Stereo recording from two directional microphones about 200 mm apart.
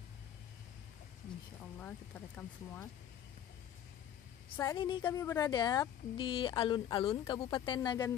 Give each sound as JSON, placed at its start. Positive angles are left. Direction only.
{"t": 1.8, "sound": "speech", "side_deg": 10}
{"t": 4.6, "sound": "speech", "side_deg": 20}